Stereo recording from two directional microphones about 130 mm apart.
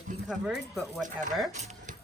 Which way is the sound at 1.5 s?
65° right (ahead or behind).